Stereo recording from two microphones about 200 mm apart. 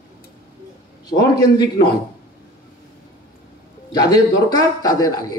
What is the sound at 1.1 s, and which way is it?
Speech, 20° left (ahead or behind).